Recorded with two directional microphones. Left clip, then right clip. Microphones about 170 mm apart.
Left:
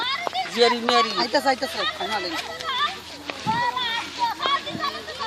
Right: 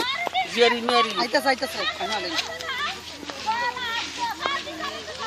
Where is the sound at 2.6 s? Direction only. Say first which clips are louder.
Left 4 dB; 45° right (ahead or behind).